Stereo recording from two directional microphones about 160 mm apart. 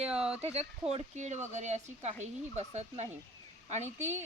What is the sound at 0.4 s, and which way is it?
Speech, 40° right (ahead or behind).